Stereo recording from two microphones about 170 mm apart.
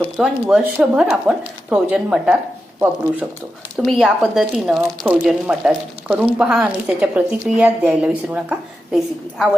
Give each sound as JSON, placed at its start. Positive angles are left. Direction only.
{"t": 0.2, "sound": "speech", "side_deg": -5}
{"t": 3.8, "sound": "speech", "side_deg": 0}